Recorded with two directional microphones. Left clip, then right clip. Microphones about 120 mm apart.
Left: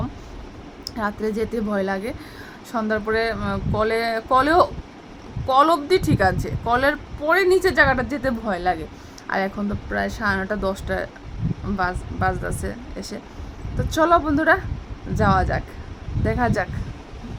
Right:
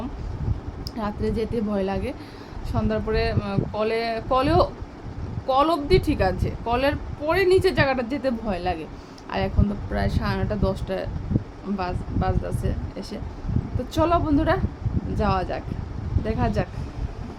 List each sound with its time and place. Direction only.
0.9 s speech: 10° left (ahead or behind)
13.9 s speech: 15° left (ahead or behind)